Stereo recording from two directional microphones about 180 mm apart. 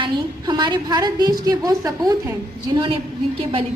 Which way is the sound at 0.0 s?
25° right (ahead or behind).